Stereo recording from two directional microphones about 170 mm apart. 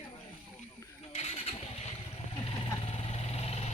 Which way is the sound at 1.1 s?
40° left (ahead or behind).